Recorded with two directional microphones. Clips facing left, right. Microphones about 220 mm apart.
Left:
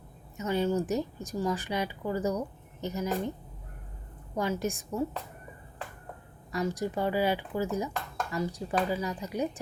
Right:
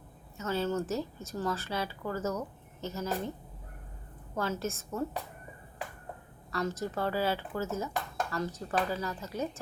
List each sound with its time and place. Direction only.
0.3 s speech: 15° left (ahead or behind)
4.4 s speech: 15° left (ahead or behind)
6.5 s speech: 15° left (ahead or behind)